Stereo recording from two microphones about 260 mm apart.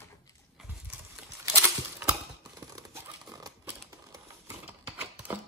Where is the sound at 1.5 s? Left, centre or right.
Centre.